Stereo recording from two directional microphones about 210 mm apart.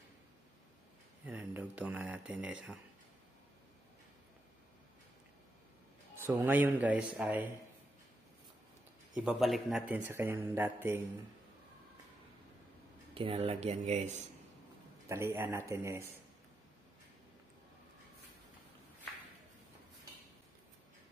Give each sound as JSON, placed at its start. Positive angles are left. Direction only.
{"t": 1.2, "sound": "speech", "side_deg": -5}
{"t": 6.2, "sound": "speech", "side_deg": -10}
{"t": 9.1, "sound": "speech", "side_deg": -5}
{"t": 13.1, "sound": "speech", "side_deg": -25}
{"t": 15.0, "sound": "speech", "side_deg": -10}